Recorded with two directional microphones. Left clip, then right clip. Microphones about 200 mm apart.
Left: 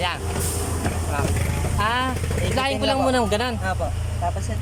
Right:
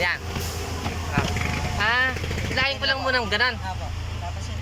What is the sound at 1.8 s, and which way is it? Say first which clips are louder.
Speech: right 1 dB; 15° left (ahead or behind).